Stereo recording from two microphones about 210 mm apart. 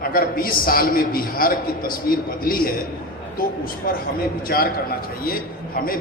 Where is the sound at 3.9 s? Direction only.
40° left (ahead or behind).